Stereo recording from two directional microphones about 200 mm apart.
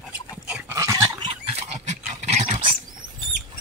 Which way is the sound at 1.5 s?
30° right (ahead or behind).